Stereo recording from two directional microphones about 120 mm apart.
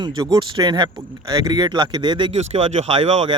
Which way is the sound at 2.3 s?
65° right (ahead or behind).